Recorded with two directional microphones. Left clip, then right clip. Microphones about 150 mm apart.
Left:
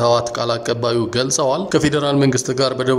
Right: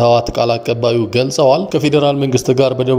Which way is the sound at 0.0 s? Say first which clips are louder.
Right 4 dB; 10° right (ahead or behind).